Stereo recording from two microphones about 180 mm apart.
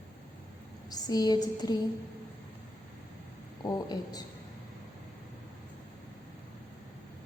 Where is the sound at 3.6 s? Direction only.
20° left (ahead or behind).